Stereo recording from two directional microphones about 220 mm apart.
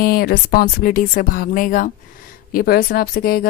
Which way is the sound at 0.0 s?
40° left (ahead or behind).